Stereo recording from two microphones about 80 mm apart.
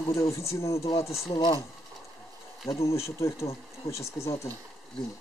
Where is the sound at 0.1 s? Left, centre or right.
Left.